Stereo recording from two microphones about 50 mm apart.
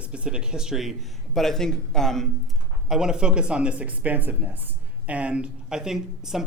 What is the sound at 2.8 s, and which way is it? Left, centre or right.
Speech, centre.